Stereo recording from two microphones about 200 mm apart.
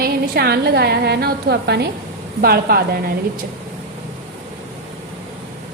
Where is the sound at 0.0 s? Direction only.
55° right (ahead or behind).